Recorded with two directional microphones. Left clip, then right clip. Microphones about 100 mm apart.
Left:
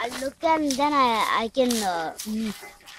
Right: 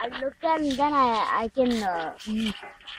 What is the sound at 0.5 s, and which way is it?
Speech, 35° left (ahead or behind).